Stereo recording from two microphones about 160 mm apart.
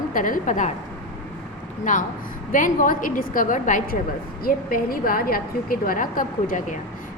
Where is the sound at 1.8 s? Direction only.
50° left (ahead or behind).